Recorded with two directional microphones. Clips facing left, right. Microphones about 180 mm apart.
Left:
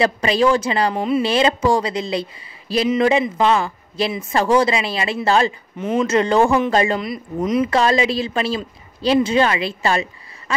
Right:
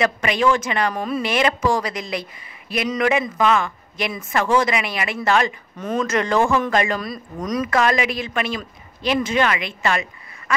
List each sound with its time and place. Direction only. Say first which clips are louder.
0.0 s speech: left 3 dB; 30° left (ahead or behind)